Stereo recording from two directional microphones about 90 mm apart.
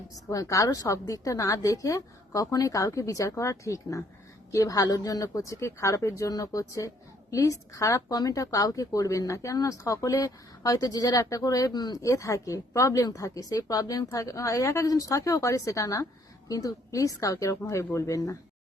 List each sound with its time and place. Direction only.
0.3 s speech: 40° left (ahead or behind)
12.0 s speech: 35° left (ahead or behind)